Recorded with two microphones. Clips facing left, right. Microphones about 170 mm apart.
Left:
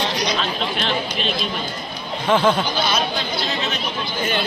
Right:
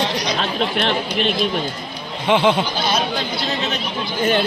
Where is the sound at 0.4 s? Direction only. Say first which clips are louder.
Right 3 dB; 60° right (ahead or behind).